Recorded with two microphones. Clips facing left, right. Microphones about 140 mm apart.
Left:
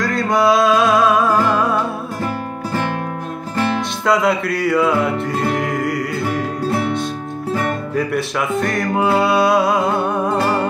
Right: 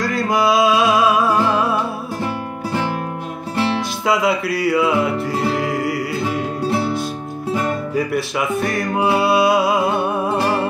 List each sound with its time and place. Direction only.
0.0 s music: centre (ahead or behind)
4.0 s music: centre (ahead or behind)
7.9 s music: centre (ahead or behind)